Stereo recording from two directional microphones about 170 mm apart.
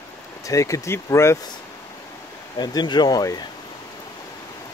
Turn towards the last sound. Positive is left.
turn(degrees=20)  # may be behind; listen again after turning